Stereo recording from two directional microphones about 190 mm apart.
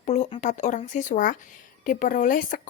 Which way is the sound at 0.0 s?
35° left (ahead or behind).